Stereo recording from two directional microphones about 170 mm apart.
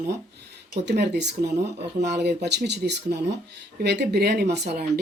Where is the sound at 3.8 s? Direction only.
75° right (ahead or behind).